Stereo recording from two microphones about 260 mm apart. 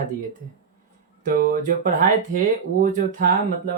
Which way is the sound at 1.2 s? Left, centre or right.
Right.